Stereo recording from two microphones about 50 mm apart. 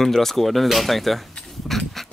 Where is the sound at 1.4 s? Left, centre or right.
Centre.